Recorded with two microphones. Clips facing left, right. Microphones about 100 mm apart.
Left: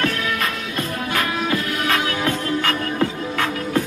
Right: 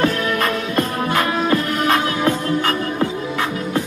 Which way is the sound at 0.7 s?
35° right (ahead or behind).